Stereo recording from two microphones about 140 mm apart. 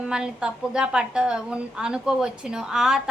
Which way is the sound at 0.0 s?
5° right (ahead or behind).